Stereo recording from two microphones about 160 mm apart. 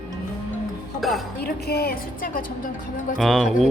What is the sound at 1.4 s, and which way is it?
A woman's voice, 80° left.